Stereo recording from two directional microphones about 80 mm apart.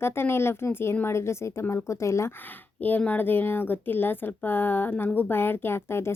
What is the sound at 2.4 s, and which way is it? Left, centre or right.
Speech, left.